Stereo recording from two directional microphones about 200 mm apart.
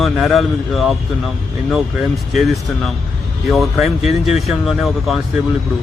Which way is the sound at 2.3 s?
Centre (ahead or behind).